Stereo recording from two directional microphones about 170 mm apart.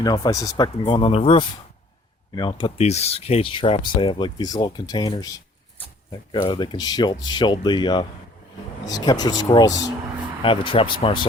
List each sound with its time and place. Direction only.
0.0 s speech: 25° left (ahead or behind)